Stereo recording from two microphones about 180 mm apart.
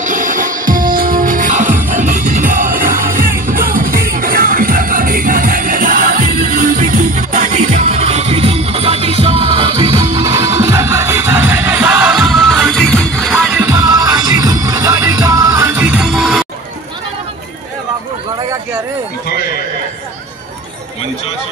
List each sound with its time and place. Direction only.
0.0 s music: 45° right (ahead or behind); by 9.9 s 30° right (ahead or behind)
9.9 s music: 15° right (ahead or behind); by 13.6 s centre (ahead or behind)
13.6 s music: 15° right (ahead or behind); by 16.4 s centre (ahead or behind)
19.2 s a sound: 60° left (ahead or behind)